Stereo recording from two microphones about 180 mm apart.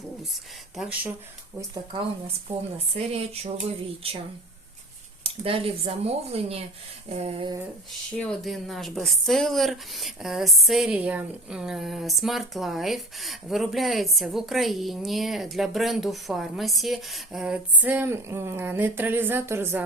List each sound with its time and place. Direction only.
0.8 s speech: 10° right (ahead or behind)
1.7 s speech: 30° right (ahead or behind)
5.2 s speech: 30° right (ahead or behind)
8.1 s speech: 5° left (ahead or behind); by 19.8 s 15° right (ahead or behind)